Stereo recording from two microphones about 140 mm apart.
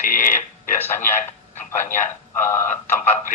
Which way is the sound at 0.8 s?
15° left (ahead or behind).